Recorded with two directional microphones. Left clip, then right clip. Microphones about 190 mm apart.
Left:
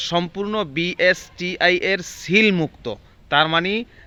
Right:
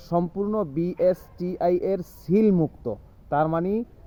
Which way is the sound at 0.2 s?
25° left (ahead or behind).